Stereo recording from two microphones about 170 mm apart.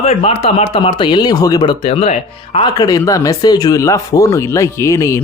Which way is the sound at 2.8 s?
20° left (ahead or behind).